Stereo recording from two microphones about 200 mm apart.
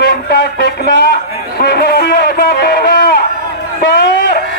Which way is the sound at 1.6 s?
50° left (ahead or behind).